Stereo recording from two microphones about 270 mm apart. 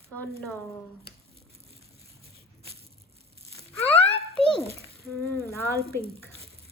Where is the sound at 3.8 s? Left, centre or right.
Centre.